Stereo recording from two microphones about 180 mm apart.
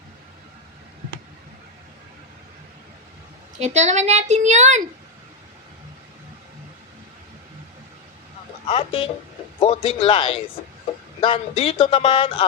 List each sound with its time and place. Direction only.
3.6 s speech: 40° right (ahead or behind)
8.6 s speech: 30° left (ahead or behind)